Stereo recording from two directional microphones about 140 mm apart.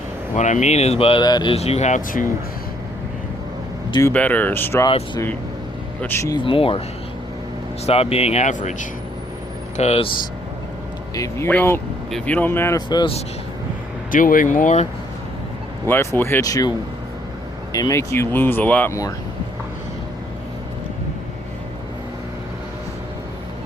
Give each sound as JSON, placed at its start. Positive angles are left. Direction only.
{"t": 0.3, "sound": "speech", "side_deg": 60}
{"t": 1.2, "sound": "speech", "side_deg": 30}
{"t": 1.5, "sound": "speech", "side_deg": 50}
{"t": 4.1, "sound": "speech", "side_deg": 10}
{"t": 4.9, "sound": "speech", "side_deg": 40}
{"t": 6.0, "sound": "speech", "side_deg": 15}
{"t": 6.3, "sound": "speech", "side_deg": 40}
{"t": 7.9, "sound": "speech", "side_deg": 45}
{"t": 9.7, "sound": "speech", "side_deg": 50}
{"t": 11.1, "sound": "speech", "side_deg": 20}
{"t": 14.1, "sound": "speech", "side_deg": 75}
{"t": 15.9, "sound": "speech", "side_deg": 15}